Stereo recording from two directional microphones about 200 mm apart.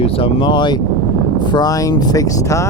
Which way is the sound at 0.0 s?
30° left (ahead or behind).